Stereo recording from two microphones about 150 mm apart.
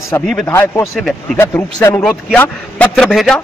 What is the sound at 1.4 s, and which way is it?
Speech, 15° left (ahead or behind).